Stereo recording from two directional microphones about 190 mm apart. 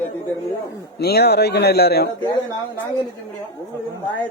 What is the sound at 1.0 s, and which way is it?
A man's voice, 60° left (ahead or behind).